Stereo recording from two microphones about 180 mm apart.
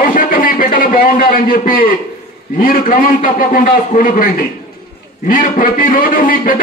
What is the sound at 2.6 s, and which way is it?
A man's voice, 50° left (ahead or behind).